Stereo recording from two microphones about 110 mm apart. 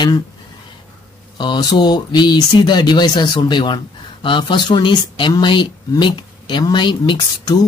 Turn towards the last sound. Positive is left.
turn(degrees=40)  # may be behind; listen again after turning